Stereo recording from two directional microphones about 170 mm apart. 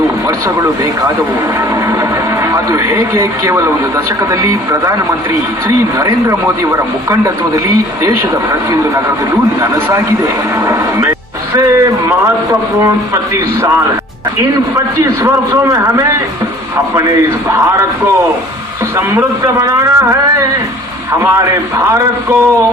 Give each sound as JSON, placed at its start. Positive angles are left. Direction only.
{"t": 2.5, "sound": "a man's voice", "side_deg": -20}
{"t": 18.9, "sound": "a man's voice", "side_deg": -15}